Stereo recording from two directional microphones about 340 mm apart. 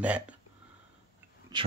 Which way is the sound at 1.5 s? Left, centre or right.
Centre.